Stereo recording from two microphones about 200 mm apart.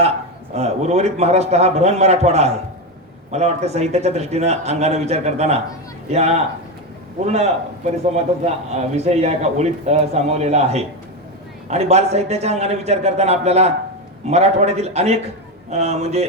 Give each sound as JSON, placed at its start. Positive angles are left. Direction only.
{"t": 0.5, "sound": "a man's voice", "side_deg": -35}